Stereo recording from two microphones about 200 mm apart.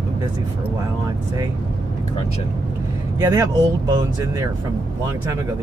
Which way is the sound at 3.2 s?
15° right (ahead or behind).